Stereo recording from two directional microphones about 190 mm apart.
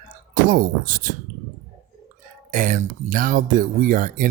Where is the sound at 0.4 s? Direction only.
45° right (ahead or behind).